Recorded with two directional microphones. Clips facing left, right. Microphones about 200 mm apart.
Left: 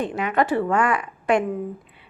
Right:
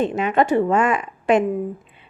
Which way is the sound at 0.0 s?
25° right (ahead or behind).